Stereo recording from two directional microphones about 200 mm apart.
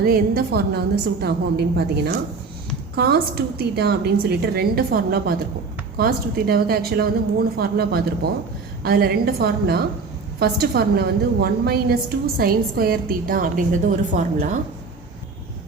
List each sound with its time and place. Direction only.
0.0 s a woman's voice: 50° right (ahead or behind)